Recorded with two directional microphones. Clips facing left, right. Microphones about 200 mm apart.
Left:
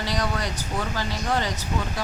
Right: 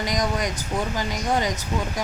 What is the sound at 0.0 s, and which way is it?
Speech, 15° right (ahead or behind).